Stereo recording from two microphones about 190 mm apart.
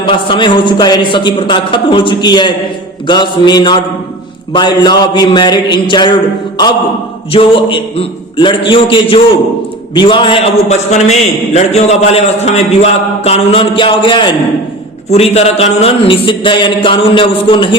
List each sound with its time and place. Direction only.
0.0 s speech: 25° left (ahead or behind)
7.3 s a man's voice: 25° left (ahead or behind)